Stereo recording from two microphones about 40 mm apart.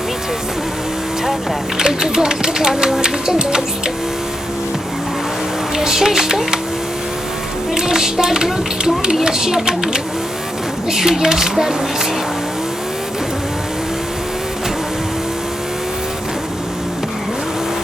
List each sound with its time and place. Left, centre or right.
1.8 s speech: centre
5.7 s speech: centre
7.7 s speech: centre